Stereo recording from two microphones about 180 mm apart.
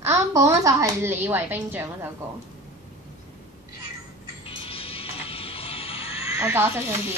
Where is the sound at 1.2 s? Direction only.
10° right (ahead or behind).